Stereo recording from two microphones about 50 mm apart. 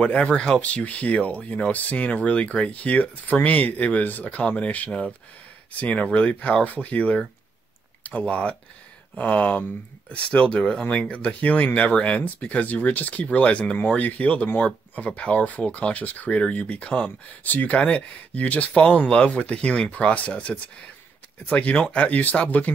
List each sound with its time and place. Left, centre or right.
0.0 s speech: left
9.1 s speech: left
10.1 s speech: left